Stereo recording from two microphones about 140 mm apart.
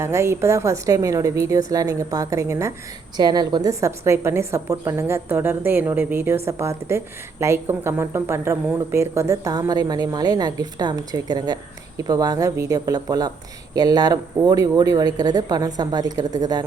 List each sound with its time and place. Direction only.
0.0 s a woman's voice: 20° right (ahead or behind)